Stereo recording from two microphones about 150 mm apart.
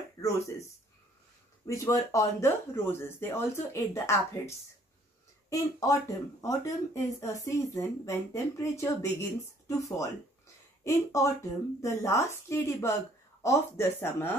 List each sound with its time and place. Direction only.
0.2 s speech: 20° left (ahead or behind)
1.7 s speech: 20° left (ahead or behind)